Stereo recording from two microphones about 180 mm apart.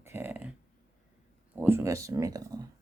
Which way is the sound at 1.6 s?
15° right (ahead or behind).